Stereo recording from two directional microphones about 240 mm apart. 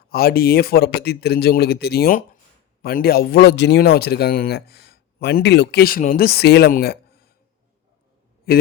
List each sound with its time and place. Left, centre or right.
0.1 s speech: left
8.5 s speech: left